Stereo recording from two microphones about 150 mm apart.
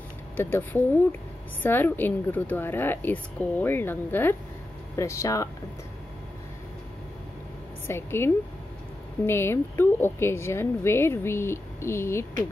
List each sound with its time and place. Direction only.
0.4 s a woman's voice: 15° left (ahead or behind)
7.8 s a woman's voice: 15° left (ahead or behind)